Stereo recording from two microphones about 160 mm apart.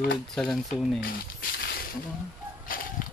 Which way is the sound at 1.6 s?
80° left.